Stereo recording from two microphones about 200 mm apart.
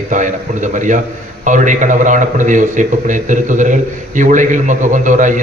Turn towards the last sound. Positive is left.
turn(degrees=-40)  # may be behind; listen again after turning